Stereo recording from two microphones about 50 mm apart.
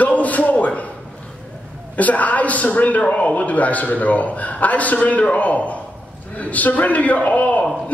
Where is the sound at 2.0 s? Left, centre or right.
Left.